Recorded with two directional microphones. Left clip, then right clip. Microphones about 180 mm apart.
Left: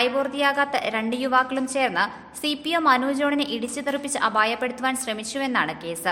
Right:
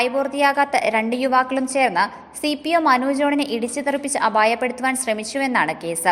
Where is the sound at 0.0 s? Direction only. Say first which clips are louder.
Right 3 dB; 20° right (ahead or behind).